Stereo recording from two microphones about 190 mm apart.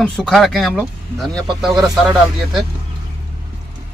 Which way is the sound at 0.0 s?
5° left (ahead or behind).